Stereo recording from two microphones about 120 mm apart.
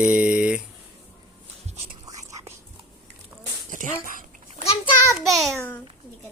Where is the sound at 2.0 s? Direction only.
25° right (ahead or behind).